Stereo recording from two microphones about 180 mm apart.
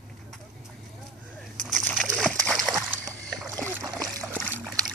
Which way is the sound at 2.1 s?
Centre (ahead or behind).